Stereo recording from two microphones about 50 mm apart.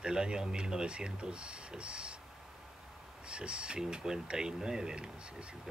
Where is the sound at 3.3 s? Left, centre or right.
Right.